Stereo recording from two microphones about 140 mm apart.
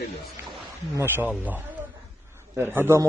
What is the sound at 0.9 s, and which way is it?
A man's voice, 15° right (ahead or behind).